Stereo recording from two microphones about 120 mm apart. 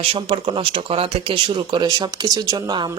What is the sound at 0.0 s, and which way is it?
Speech, 45° right (ahead or behind).